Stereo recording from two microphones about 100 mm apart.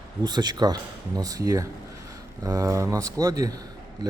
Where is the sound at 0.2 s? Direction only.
45° right (ahead or behind).